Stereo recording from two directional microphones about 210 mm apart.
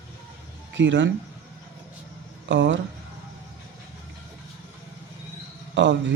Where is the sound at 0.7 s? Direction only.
60° right (ahead or behind).